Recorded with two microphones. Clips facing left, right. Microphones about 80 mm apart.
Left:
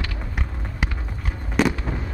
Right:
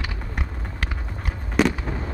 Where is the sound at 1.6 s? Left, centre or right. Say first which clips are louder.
Even; centre.